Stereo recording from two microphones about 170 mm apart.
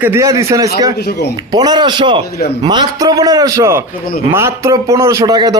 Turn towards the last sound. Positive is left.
turn(degrees=-25)  # may be behind; listen again after turning